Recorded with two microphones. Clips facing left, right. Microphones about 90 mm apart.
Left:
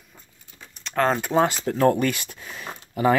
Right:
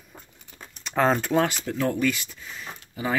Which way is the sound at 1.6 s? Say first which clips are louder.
Left 5 dB; 45° left (ahead or behind).